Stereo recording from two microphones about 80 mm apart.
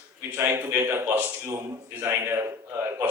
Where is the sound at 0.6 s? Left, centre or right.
Right.